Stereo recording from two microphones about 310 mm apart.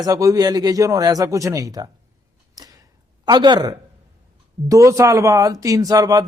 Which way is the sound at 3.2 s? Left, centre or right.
Centre.